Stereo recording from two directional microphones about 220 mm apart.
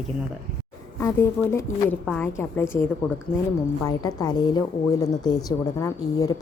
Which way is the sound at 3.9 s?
15° left (ahead or behind).